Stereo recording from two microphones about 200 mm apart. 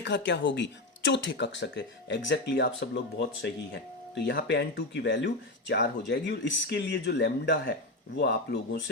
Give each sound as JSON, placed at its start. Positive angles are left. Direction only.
{"t": 0.0, "sound": "speech", "side_deg": 60}